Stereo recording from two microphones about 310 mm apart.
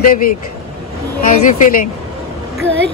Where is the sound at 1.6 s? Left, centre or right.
Left.